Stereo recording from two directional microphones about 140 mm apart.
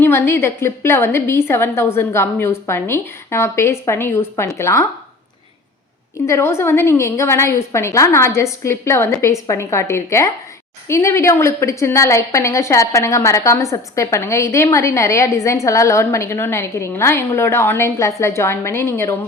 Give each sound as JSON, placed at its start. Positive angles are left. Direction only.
{"t": 0.0, "sound": "a woman's voice", "side_deg": 15}
{"t": 6.2, "sound": "a woman's voice", "side_deg": 20}